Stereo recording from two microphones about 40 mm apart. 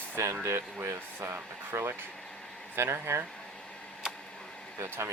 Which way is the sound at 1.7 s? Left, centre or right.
Right.